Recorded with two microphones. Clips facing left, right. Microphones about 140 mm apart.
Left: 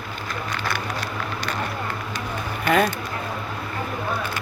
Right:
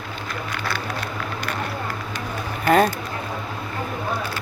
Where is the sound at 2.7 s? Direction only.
35° right (ahead or behind).